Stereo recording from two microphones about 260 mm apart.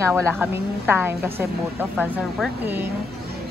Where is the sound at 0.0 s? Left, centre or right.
Centre.